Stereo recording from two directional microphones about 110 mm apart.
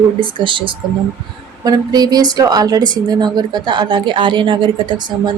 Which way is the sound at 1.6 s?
35° right (ahead or behind).